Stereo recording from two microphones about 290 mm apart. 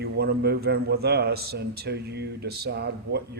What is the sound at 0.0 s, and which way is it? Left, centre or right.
A man's voice, right.